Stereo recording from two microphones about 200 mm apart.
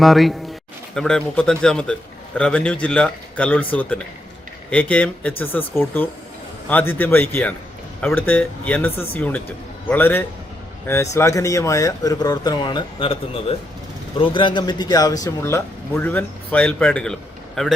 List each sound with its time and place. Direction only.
0.0 s a man's voice: centre (ahead or behind)